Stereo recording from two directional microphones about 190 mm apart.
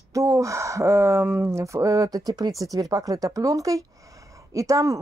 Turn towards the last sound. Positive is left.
turn(degrees=-15)  # may be behind; listen again after turning